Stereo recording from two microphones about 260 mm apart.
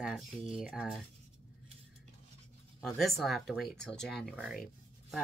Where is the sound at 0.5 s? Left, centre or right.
Centre.